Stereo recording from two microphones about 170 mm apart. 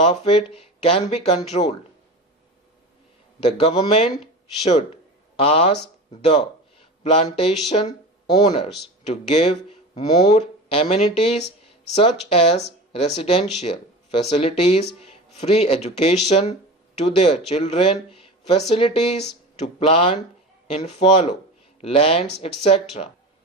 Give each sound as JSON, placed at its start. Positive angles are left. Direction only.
{"t": 0.0, "sound": "speech", "side_deg": 35}
{"t": 3.4, "sound": "speech", "side_deg": 40}
{"t": 6.1, "sound": "a sound", "side_deg": 35}
{"t": 7.4, "sound": "speech", "side_deg": 35}
{"t": 7.9, "sound": "speech", "side_deg": 25}
{"t": 9.3, "sound": "speech", "side_deg": 35}